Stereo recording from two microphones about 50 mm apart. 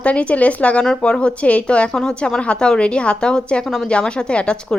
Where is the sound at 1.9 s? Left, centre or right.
Centre.